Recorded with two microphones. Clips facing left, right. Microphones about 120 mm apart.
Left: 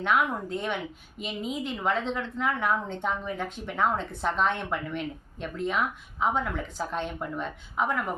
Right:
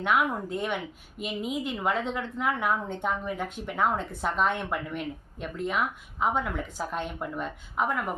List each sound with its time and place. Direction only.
0.0 s a woman's voice: 5° right (ahead or behind)